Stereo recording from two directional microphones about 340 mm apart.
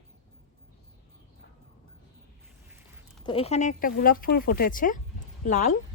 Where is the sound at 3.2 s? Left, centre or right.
Centre.